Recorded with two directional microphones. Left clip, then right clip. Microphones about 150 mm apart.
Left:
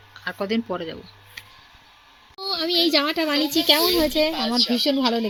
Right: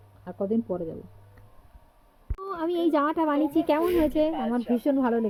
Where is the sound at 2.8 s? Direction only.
Centre (ahead or behind).